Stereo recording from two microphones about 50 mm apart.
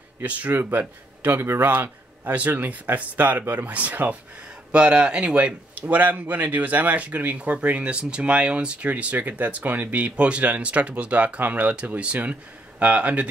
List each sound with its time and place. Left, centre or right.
0.2 s a man's voice: right
1.4 s speech: right
1.7 s a man's voice: right
4.7 s a man's voice: right